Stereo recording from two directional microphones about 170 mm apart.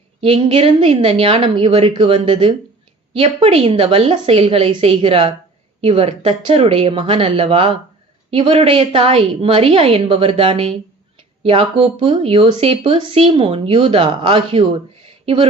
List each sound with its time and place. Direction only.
0.2 s speech: 35° right (ahead or behind)